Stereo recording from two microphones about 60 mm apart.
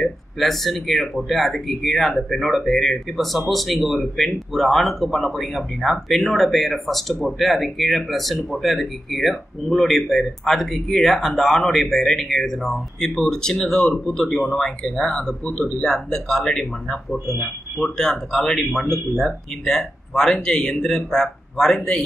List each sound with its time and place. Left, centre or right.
0.0 s speech: centre